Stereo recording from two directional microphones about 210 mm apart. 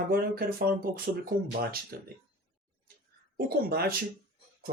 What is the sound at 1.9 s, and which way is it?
Speech, 45° right (ahead or behind).